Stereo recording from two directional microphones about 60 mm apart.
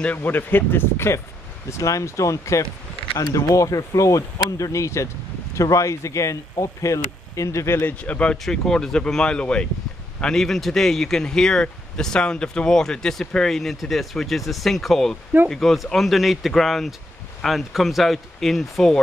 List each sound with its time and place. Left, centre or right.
0.0 s speech: left
1.7 s speech: left
8.0 s speech: centre